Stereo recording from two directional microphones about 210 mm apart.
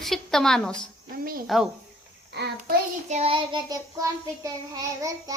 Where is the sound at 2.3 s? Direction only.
50° right (ahead or behind).